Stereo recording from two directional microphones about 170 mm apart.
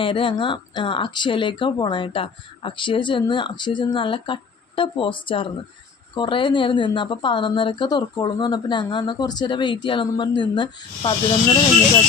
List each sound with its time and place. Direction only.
0.0 s speech: 30° left (ahead or behind)